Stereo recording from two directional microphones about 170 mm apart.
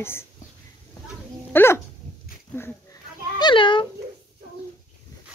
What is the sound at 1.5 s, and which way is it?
Speech, 15° left (ahead or behind).